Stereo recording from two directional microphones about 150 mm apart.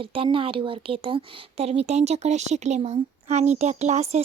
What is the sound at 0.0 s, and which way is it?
A woman's voice, 35° right (ahead or behind).